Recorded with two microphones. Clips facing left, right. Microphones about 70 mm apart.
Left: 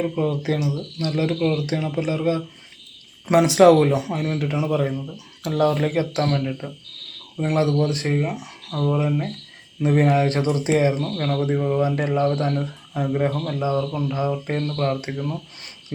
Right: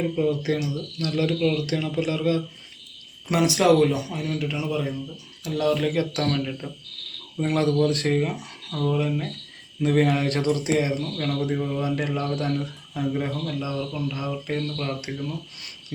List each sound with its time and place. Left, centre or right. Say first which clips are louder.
0.2 s a man's voice: left 1 dB; left